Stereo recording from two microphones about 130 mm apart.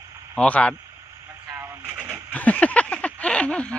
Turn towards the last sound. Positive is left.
turn(degrees=10)  # may be behind; listen again after turning